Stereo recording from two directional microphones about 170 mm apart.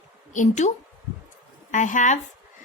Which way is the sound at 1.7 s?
45° left (ahead or behind).